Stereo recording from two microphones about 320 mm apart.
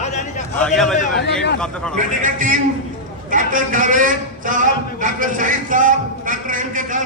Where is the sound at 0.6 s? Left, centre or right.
Centre.